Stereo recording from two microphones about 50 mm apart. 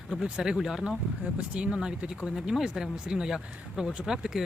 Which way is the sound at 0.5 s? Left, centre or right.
Centre.